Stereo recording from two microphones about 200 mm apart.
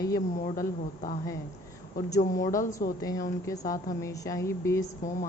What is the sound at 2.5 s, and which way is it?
Speech, 40° left (ahead or behind).